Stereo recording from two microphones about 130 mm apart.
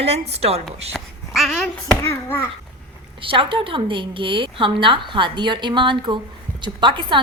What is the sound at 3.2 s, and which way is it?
A woman's voice, 40° right (ahead or behind).